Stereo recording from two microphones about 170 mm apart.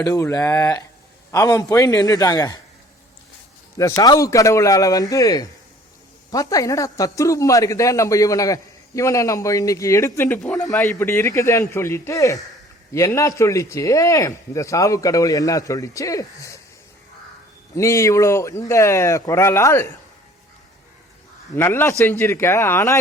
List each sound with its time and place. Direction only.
0.0 s speech: 20° left (ahead or behind)
3.8 s speech: 20° left (ahead or behind); by 10.8 s centre (ahead or behind)
10.8 s speech: 15° left (ahead or behind)
17.7 s speech: 15° left (ahead or behind)
21.5 s speech: 15° left (ahead or behind)